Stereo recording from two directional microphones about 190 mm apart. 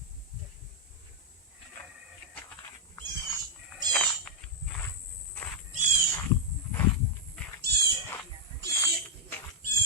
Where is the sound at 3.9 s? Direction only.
5° left (ahead or behind).